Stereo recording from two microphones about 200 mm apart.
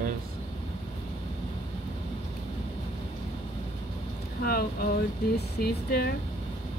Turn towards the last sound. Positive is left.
turn(degrees=50)  # may be behind; listen again after turning